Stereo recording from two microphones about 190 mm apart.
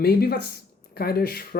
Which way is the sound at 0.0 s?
55° left (ahead or behind).